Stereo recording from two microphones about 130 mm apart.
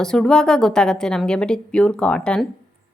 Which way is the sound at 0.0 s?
5° left (ahead or behind).